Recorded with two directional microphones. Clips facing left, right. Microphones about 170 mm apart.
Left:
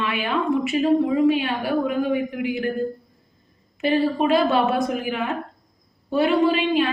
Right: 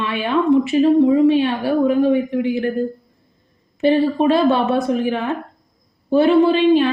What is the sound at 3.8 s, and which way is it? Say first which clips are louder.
Speech: right 5 dB; 25° right (ahead or behind).